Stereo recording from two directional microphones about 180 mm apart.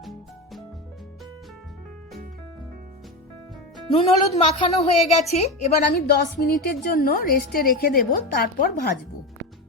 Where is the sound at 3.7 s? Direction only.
35° left (ahead or behind).